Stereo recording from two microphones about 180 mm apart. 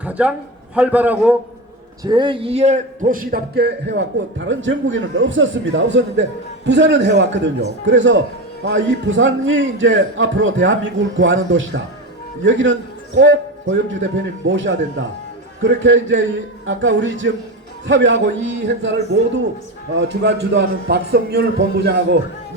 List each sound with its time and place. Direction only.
0.0 s a sound: 10° right (ahead or behind)
0.8 s a man's voice: 10° right (ahead or behind)
2.0 s a man's voice: 25° right (ahead or behind); by 18.9 s 90° right
20.0 s speech: 70° right (ahead or behind)